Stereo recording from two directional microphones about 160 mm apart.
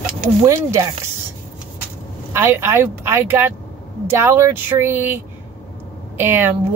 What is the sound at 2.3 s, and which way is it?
Speech, 15° right (ahead or behind).